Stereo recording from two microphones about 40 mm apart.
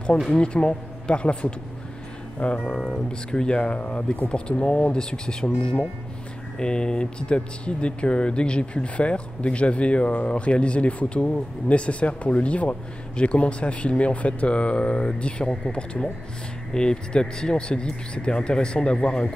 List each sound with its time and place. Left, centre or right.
0.3 s speech: left